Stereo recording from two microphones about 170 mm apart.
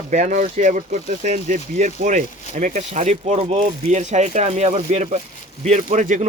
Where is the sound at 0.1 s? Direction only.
45° right (ahead or behind).